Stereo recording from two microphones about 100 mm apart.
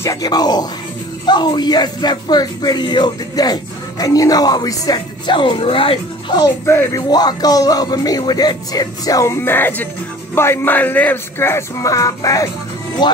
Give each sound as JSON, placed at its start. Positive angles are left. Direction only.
{"t": 0.0, "sound": "speech", "side_deg": 35}
{"t": 6.6, "sound": "speech", "side_deg": 25}
{"t": 7.0, "sound": "speech", "side_deg": 40}